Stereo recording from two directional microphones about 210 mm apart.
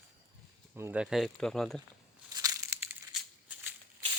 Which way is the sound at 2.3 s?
15° right (ahead or behind).